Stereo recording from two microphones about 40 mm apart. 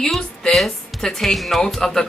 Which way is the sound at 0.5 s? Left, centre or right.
Centre.